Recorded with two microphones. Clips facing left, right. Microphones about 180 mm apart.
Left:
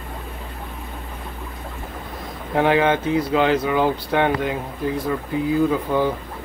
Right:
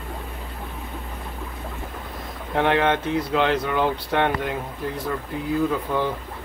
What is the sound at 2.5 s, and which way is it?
Speech, 5° left (ahead or behind).